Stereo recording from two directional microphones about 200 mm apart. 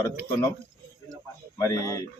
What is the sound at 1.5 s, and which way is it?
Speech, 15° left (ahead or behind).